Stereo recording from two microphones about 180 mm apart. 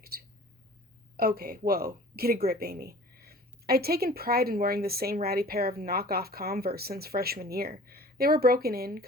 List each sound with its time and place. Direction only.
1.1 s speech: 55° right (ahead or behind)